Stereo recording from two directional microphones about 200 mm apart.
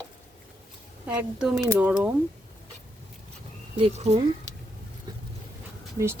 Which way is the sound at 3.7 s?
30° right (ahead or behind).